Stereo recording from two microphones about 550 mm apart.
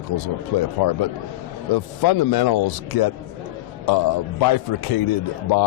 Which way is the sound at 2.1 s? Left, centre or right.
Left.